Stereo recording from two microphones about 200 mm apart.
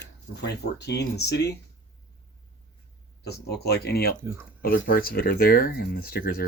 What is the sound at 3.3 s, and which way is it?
Speech, 55° left (ahead or behind).